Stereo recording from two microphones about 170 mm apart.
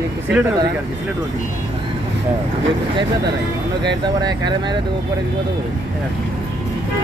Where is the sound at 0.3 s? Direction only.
10° right (ahead or behind).